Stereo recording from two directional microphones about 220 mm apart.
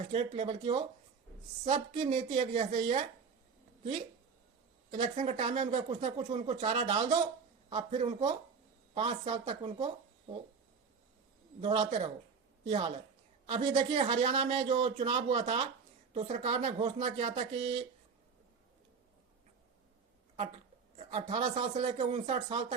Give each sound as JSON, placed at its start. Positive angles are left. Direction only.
{"t": 0.0, "sound": "a woman's voice", "side_deg": -25}
{"t": 4.9, "sound": "speech", "side_deg": -35}
{"t": 11.6, "sound": "speech", "side_deg": -25}
{"t": 21.1, "sound": "speech", "side_deg": -25}